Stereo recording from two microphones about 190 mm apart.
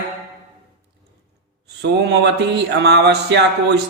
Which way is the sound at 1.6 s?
60° right (ahead or behind).